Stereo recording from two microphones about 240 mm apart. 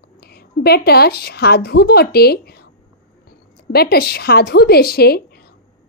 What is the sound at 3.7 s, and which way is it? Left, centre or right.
A woman's voice, left.